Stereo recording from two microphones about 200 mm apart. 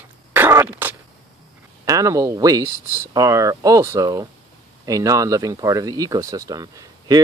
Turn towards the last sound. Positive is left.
turn(degrees=-20)  # may be behind; listen again after turning